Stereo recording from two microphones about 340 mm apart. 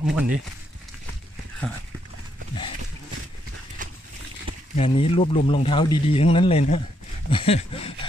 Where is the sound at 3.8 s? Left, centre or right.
Right.